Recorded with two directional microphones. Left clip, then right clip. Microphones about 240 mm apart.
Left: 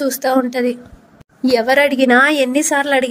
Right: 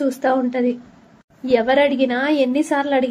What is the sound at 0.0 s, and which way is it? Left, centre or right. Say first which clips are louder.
A woman's voice: left 3 dB; left.